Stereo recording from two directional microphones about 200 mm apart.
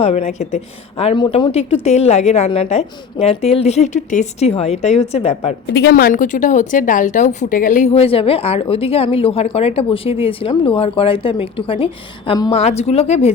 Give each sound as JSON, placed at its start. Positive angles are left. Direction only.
{"t": 0.0, "sound": "a woman's voice", "side_deg": 30}
{"t": 5.7, "sound": "a woman's voice", "side_deg": 55}